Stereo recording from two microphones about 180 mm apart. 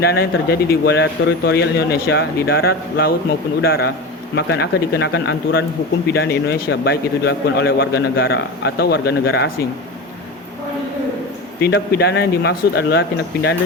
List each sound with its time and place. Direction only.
0.0 s a man's voice: 60° left (ahead or behind)
11.6 s a man's voice: 65° left (ahead or behind)